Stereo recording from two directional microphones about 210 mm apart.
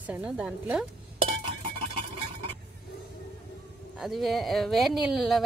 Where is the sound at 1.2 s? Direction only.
25° right (ahead or behind).